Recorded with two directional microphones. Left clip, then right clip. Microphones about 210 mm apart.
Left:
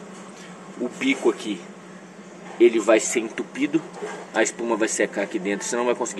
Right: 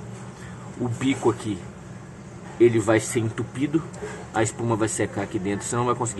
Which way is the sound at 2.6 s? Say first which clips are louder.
Left 2 dB; 15° right (ahead or behind).